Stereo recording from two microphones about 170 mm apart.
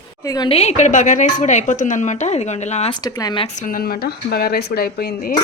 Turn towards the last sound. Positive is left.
turn(degrees=55)  # may be behind; listen again after turning